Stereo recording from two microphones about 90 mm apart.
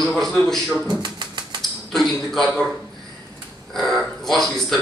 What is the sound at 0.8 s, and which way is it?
Typewriter, 55° right (ahead or behind).